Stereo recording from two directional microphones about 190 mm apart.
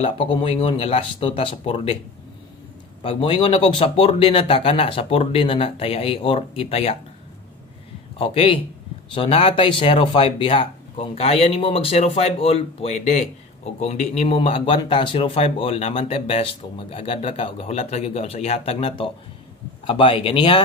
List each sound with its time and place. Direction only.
0.0 s speech: 25° left (ahead or behind)
3.0 s speech: 30° left (ahead or behind)
8.2 s speech: 30° left (ahead or behind)